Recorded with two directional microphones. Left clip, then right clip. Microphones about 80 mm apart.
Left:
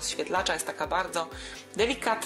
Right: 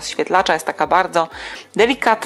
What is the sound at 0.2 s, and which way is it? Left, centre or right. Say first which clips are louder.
Speech: right 13 dB; right.